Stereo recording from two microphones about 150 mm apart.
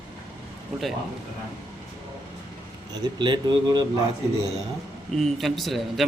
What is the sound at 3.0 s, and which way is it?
Speech, 30° right (ahead or behind).